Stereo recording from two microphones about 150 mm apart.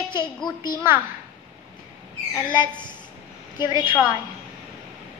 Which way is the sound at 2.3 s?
30° left (ahead or behind).